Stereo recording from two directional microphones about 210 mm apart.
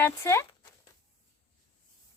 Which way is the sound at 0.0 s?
15° left (ahead or behind).